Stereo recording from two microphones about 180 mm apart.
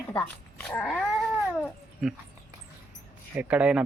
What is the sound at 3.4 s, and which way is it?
Speech, 5° right (ahead or behind).